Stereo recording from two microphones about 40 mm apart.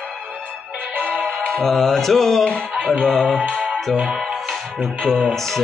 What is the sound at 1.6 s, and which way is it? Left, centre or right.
Music, centre.